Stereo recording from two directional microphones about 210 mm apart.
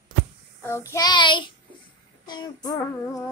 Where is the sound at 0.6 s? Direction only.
15° left (ahead or behind).